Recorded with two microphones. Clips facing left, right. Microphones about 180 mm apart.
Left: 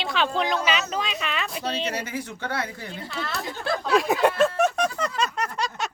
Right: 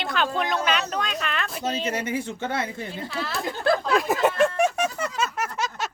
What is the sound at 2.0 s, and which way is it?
Speech, 25° right (ahead or behind).